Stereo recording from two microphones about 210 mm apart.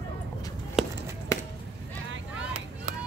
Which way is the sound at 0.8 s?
Centre (ahead or behind).